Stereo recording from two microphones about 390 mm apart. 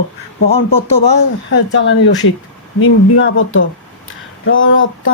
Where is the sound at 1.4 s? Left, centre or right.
Left.